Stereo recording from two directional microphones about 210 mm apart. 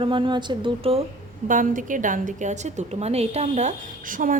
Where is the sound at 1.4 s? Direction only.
40° right (ahead or behind).